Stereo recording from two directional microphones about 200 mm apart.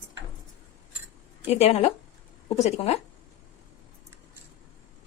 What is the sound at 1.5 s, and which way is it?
Speech, 30° left (ahead or behind).